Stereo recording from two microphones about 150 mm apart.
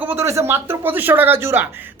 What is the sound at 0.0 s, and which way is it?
A woman's voice, 15° right (ahead or behind).